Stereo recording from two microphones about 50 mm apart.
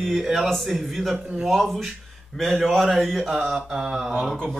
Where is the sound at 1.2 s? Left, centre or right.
Centre.